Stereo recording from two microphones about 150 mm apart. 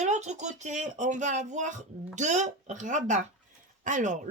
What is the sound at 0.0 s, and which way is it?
Speech, 50° right (ahead or behind).